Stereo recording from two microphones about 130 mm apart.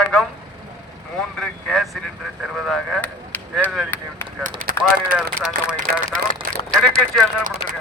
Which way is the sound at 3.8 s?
15° left (ahead or behind).